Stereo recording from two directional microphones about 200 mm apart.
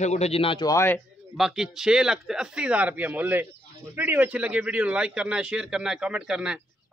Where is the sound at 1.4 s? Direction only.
5° right (ahead or behind).